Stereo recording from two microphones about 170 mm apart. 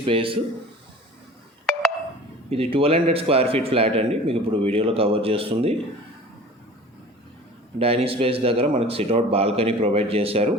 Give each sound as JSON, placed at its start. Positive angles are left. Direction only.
{"t": 0.0, "sound": "a man's voice", "side_deg": -30}
{"t": 2.5, "sound": "a man's voice", "side_deg": -35}
{"t": 7.8, "sound": "a man's voice", "side_deg": -35}